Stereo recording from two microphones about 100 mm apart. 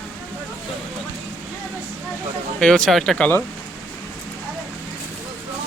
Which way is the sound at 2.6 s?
5° left (ahead or behind).